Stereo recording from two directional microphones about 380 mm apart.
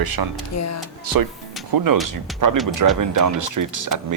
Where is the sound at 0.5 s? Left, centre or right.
Left.